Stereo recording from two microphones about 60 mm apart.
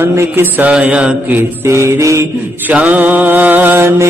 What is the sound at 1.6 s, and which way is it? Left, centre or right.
Music, right.